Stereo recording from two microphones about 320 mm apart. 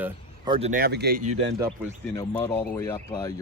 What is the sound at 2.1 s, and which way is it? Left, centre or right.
Speech, centre.